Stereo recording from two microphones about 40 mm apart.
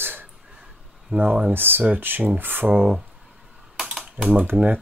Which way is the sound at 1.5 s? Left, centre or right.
Right.